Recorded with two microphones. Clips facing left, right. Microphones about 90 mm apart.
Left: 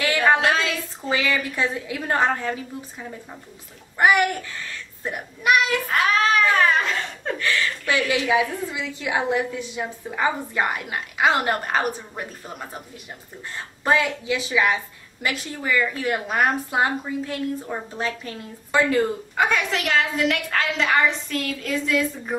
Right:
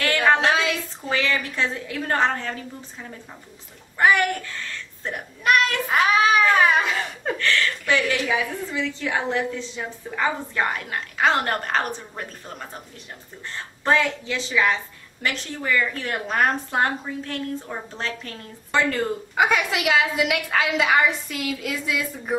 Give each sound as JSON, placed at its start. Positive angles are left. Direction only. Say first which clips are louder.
{"t": 0.0, "sound": "a sound", "louder": "even", "side_deg": 10}
{"t": 1.1, "sound": "a woman's voice", "louder": "left 1 dB", "side_deg": 10}
{"t": 5.0, "sound": "a woman's voice", "louder": "left 1 dB", "side_deg": 5}
{"t": 5.9, "sound": "speech", "louder": "right 4 dB", "side_deg": -10}
{"t": 7.3, "sound": "a woman's voice", "louder": "right 1 dB", "side_deg": 10}
{"t": 13.8, "sound": "a woman's voice", "louder": "even", "side_deg": 10}
{"t": 19.3, "sound": "a woman's voice", "louder": "right 2 dB", "side_deg": -10}